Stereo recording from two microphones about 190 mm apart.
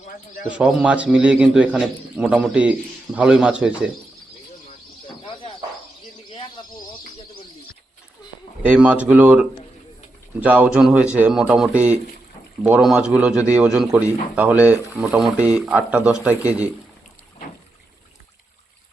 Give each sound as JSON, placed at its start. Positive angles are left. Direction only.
{"t": 0.4, "sound": "a man's voice", "side_deg": -5}
{"t": 5.0, "sound": "a sound", "side_deg": 25}
{"t": 8.7, "sound": "a man's voice", "side_deg": -5}